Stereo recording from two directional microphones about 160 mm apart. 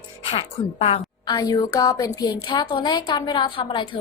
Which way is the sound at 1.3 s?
25° left (ahead or behind).